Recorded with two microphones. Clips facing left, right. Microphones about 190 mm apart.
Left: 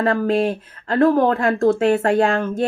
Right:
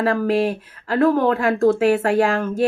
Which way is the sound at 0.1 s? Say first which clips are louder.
Left 1 dB; 25° left (ahead or behind).